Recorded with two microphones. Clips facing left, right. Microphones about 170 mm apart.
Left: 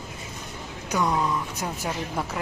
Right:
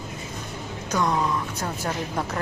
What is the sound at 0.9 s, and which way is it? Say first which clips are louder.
Speech: right 1 dB; 10° left (ahead or behind).